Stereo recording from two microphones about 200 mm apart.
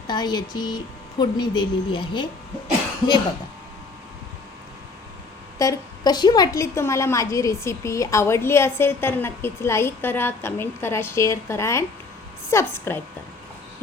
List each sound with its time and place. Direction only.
0.1 s speech: 20° left (ahead or behind)
5.5 s a woman's voice: 20° left (ahead or behind)